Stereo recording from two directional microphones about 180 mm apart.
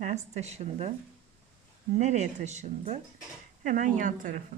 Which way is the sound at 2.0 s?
40° right (ahead or behind).